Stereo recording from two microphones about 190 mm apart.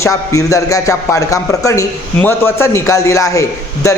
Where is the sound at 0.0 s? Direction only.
15° left (ahead or behind).